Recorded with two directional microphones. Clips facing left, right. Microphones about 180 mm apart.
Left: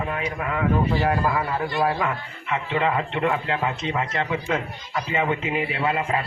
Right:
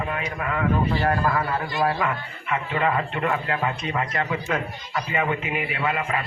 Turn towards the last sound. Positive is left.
turn(degrees=30)  # may be behind; listen again after turning